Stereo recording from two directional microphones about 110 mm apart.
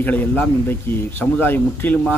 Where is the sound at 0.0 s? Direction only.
15° left (ahead or behind).